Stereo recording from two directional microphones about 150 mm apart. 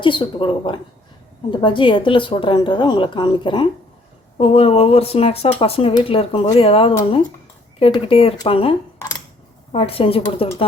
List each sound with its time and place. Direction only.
0.0 s speech: 35° left (ahead or behind)
4.4 s speech: 40° left (ahead or behind)
9.7 s speech: 40° left (ahead or behind)